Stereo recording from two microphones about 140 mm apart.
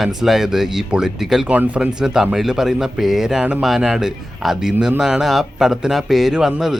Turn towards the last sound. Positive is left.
turn(degrees=0)  # may be behind; listen again after turning